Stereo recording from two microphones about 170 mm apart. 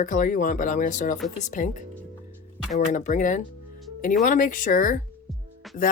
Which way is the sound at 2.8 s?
50° left (ahead or behind).